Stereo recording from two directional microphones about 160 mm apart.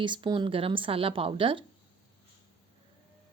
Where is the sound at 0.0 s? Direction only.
30° right (ahead or behind).